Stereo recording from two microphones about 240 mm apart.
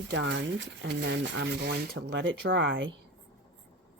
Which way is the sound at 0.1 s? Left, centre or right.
Right.